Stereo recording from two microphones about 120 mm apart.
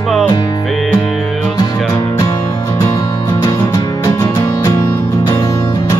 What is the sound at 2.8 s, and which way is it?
Music, 25° left (ahead or behind).